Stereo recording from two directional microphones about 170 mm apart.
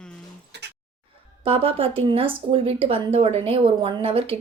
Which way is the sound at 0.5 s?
85° right.